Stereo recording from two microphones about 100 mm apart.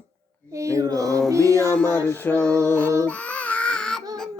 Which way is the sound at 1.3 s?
30° right (ahead or behind).